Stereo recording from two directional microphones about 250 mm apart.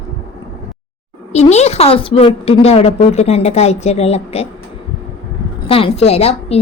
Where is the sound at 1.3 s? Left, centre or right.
Left.